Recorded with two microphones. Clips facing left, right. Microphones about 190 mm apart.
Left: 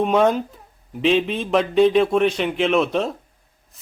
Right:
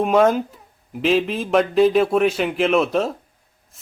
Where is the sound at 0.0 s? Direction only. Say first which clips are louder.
Right 1 dB; centre (ahead or behind).